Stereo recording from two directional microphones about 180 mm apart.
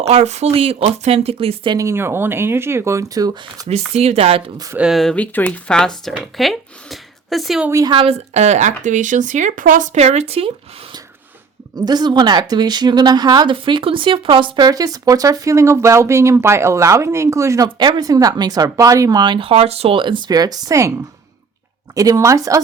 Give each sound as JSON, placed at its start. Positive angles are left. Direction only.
{"t": 0.0, "sound": "a woman's voice", "side_deg": -35}
{"t": 3.7, "sound": "speech", "side_deg": -35}
{"t": 4.8, "sound": "speech", "side_deg": 0}
{"t": 7.7, "sound": "speech", "side_deg": -20}
{"t": 7.9, "sound": "speech", "side_deg": -35}
{"t": 11.9, "sound": "a woman's voice", "side_deg": -25}
{"t": 21.9, "sound": "speech", "side_deg": -20}